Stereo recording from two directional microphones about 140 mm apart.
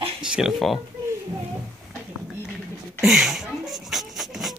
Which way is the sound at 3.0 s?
Centre (ahead or behind).